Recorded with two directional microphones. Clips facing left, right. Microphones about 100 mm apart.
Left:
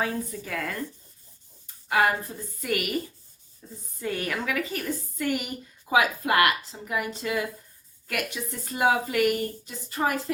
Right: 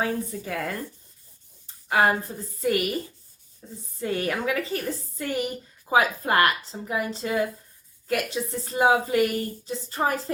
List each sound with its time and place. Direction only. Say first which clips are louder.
0.0 s a woman's voice: right 2 dB; 25° right (ahead or behind)
1.6 s a sound: right 2 dB; 30° right (ahead or behind)
2.6 s a woman's voice: right 4 dB; 30° right (ahead or behind)
4.0 s a woman's voice: right 3 dB; 30° right (ahead or behind)